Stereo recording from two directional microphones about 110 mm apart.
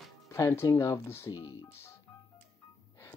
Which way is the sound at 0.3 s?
25° left (ahead or behind).